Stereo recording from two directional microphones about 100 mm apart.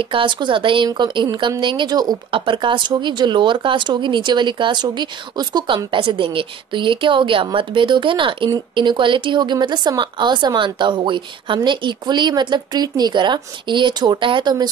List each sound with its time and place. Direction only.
0.1 s speech: 55° right (ahead or behind)
2.3 s speech: 55° right (ahead or behind)